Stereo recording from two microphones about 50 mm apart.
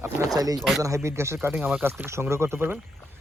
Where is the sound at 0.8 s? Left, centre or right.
Right.